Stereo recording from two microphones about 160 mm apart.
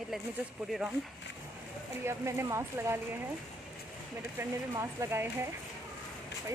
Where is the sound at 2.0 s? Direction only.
15° right (ahead or behind).